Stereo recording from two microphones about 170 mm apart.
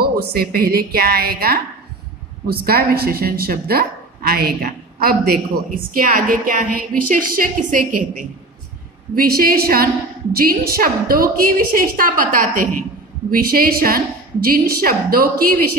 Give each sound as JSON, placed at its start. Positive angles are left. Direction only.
{"t": 0.0, "sound": "a woman's voice", "side_deg": -65}